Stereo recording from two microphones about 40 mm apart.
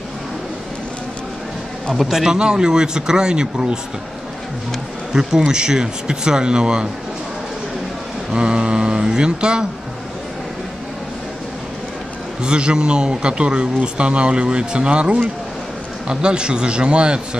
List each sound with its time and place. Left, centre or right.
2.0 s a man's voice: centre
2.2 s speech: centre
5.1 s speech: centre
8.3 s speech: right
12.4 s speech: right